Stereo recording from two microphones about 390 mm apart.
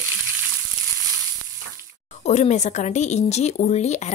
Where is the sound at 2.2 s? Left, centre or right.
Centre.